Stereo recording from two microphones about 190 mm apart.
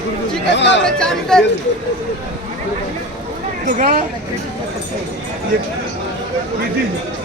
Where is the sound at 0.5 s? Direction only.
70° left (ahead or behind).